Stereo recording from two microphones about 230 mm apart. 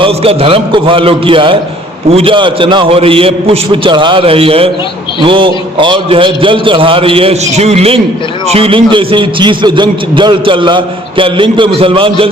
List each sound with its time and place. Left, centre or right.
0.0 s a man's voice: right